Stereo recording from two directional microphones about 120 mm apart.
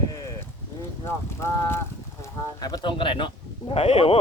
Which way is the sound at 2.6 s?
35° left (ahead or behind).